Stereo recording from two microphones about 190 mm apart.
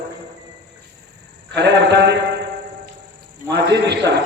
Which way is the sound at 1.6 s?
65° right (ahead or behind).